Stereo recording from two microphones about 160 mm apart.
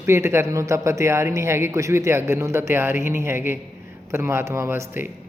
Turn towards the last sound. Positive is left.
turn(degrees=-15)  # may be behind; listen again after turning